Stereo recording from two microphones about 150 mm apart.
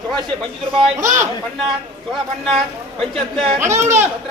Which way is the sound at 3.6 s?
20° right (ahead or behind).